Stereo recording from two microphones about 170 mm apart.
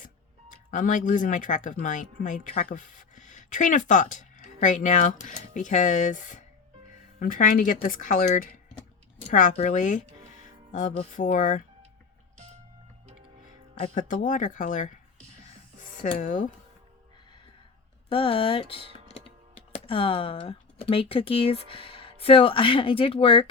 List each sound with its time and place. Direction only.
0.7 s speech: 50° left (ahead or behind)
9.6 s speech: 45° left (ahead or behind)
13.8 s speech: 50° left (ahead or behind)
16.0 s speech: 50° left (ahead or behind)
18.1 s speech: 30° left (ahead or behind)